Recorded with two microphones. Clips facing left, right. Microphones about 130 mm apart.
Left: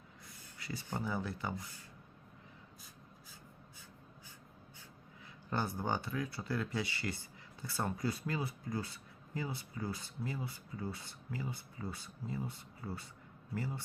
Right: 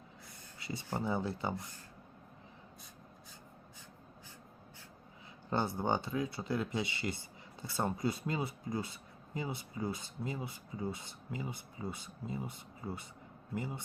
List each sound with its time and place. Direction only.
0.6 s speech: 25° right (ahead or behind)
5.5 s speech: 25° right (ahead or behind)